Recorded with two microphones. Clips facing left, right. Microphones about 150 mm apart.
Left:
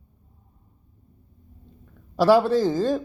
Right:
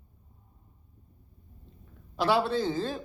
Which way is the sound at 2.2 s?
40° left (ahead or behind).